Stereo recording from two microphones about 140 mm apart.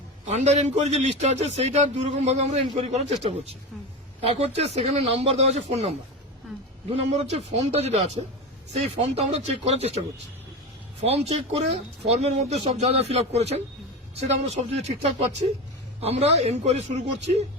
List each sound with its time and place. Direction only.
0.3 s a man's voice: 50° right (ahead or behind)
6.9 s a man's voice: 50° right (ahead or behind)
11.0 s a man's voice: 45° right (ahead or behind)